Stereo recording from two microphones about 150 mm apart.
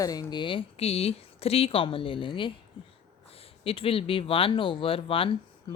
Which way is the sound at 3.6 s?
40° left (ahead or behind).